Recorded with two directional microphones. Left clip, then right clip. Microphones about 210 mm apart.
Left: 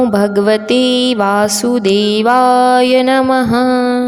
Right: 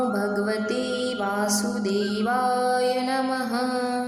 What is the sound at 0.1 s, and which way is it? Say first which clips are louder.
A woman's voice: left 14 dB; 40° left (ahead or behind).